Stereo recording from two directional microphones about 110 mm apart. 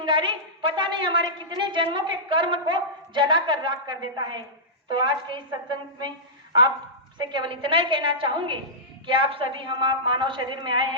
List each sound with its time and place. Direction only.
0.0 s a woman's voice: 45° right (ahead or behind)
7.2 s a woman's voice: 45° right (ahead or behind)